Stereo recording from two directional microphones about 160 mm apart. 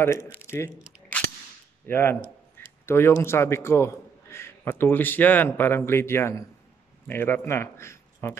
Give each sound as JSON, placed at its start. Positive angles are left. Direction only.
{"t": 0.0, "sound": "a man's voice", "side_deg": 15}
{"t": 1.9, "sound": "a man's voice", "side_deg": 15}
{"t": 2.6, "sound": "a sound", "side_deg": 15}
{"t": 2.9, "sound": "a man's voice", "side_deg": 15}